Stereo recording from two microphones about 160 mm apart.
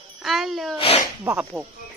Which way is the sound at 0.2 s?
Centre (ahead or behind).